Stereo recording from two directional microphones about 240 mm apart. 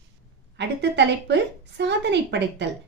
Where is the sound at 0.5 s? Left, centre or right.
Right.